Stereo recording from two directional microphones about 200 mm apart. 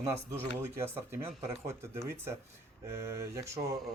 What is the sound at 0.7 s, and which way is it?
Speech, 10° right (ahead or behind).